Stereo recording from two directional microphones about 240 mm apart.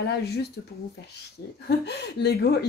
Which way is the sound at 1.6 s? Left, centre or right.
Left.